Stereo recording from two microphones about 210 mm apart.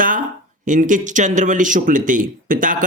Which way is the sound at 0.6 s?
35° right (ahead or behind).